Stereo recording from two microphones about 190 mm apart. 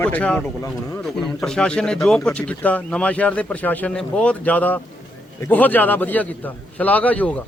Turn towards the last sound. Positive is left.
turn(degrees=10)  # may be behind; listen again after turning